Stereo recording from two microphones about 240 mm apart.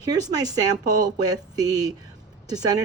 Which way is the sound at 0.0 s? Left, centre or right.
Centre.